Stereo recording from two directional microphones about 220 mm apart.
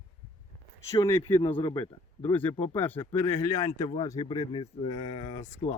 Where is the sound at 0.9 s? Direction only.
20° left (ahead or behind).